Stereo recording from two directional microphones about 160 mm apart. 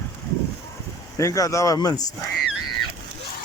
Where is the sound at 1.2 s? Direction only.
20° left (ahead or behind).